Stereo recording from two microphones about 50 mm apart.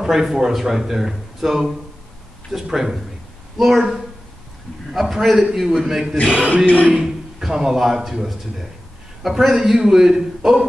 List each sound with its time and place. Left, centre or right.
0.0 s a man's voice: centre
6.3 s speech: right
6.9 s a man's voice: centre